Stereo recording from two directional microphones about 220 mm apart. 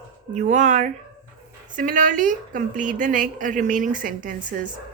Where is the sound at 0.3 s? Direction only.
35° right (ahead or behind).